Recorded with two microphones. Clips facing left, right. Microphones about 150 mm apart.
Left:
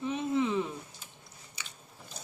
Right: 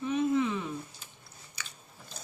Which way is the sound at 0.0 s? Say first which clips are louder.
Right 2 dB; 20° left (ahead or behind).